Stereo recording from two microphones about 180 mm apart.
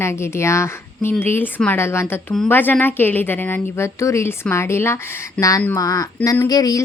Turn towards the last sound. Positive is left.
turn(degrees=20)  # may be behind; listen again after turning